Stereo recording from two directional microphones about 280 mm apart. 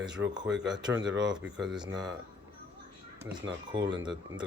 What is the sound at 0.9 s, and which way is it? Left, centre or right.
Speech, right.